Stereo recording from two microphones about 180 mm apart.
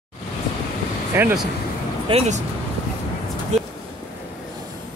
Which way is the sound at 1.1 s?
10° right (ahead or behind).